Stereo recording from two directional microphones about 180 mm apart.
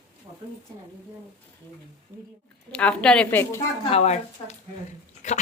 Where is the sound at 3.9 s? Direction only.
35° left (ahead or behind).